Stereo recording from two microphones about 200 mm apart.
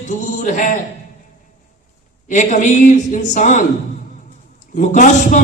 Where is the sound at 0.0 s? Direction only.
40° left (ahead or behind).